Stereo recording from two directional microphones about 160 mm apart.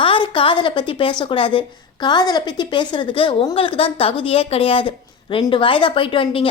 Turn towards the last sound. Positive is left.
turn(degrees=35)  # may be behind; listen again after turning